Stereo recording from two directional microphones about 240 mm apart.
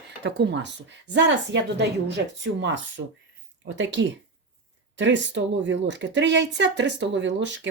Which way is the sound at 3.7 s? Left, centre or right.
Right.